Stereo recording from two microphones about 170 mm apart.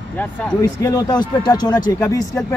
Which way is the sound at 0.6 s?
20° left (ahead or behind).